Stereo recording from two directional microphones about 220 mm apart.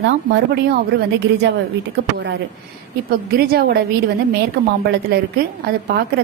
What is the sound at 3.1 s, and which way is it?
Speech, 45° right (ahead or behind).